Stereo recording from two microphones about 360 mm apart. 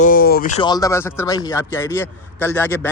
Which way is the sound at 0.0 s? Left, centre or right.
Left.